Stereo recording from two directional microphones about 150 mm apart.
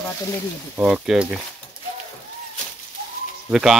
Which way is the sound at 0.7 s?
5° right (ahead or behind).